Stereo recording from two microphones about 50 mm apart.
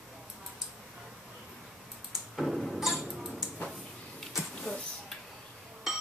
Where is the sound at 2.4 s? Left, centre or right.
Centre.